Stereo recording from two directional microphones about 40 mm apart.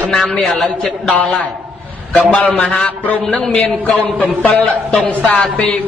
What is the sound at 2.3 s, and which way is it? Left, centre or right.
Speech, left.